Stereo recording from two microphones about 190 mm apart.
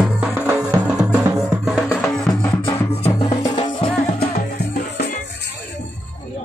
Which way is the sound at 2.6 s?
30° left (ahead or behind).